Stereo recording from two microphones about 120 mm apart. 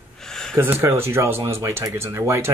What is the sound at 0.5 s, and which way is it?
Speech, 20° right (ahead or behind).